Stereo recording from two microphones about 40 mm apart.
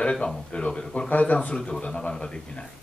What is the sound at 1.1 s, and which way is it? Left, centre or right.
Speech, left.